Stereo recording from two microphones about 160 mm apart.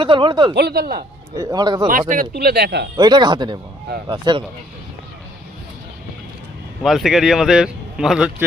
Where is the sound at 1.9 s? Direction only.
55° right (ahead or behind).